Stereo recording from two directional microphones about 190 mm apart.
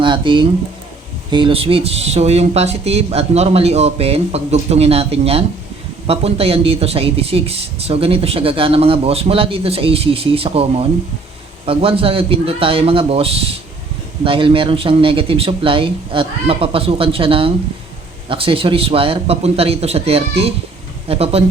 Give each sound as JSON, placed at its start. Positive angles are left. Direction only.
{"t": 0.0, "sound": "speech", "side_deg": -25}